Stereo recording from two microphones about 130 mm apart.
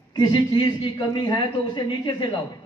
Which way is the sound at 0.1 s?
35° left (ahead or behind).